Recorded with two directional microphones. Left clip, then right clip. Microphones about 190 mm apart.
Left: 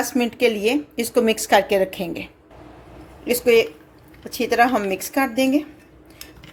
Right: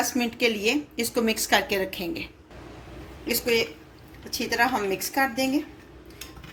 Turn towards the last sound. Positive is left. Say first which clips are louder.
# left 5 dB
turn(degrees=55)  # may be behind; listen again after turning